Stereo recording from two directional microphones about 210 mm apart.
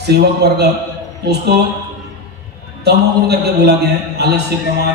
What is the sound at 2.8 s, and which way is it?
Speech, 50° right (ahead or behind).